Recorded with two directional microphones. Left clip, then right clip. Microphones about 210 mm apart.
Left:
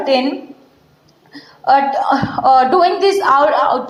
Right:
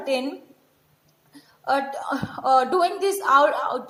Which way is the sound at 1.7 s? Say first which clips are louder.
Left 12 dB; 50° right (ahead or behind).